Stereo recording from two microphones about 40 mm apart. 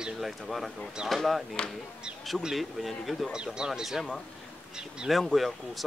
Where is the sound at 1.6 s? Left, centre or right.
Left.